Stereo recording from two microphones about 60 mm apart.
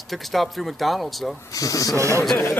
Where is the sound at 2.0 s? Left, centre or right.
Right.